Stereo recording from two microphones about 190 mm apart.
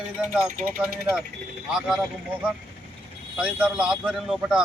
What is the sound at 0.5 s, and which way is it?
Speech, 45° right (ahead or behind).